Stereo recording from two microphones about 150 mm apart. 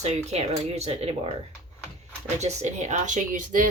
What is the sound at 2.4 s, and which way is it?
Speech, 50° right (ahead or behind).